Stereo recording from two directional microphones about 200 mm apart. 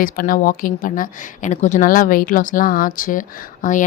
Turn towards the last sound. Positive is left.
turn(degrees=40)  # may be behind; listen again after turning